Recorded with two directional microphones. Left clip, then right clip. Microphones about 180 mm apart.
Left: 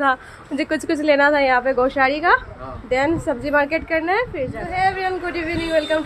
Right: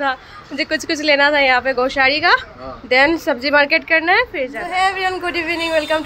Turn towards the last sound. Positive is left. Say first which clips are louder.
# right 2 dB
turn(degrees=-5)  # may be behind; listen again after turning